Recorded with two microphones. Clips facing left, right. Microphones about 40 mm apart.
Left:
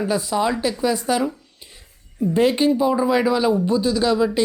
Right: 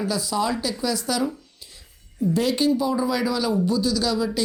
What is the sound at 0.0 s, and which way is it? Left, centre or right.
Speech, left.